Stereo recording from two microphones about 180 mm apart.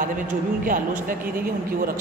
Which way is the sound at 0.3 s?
50° right (ahead or behind).